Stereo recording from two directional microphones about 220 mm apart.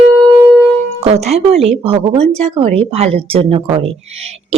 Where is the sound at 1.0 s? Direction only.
30° right (ahead or behind).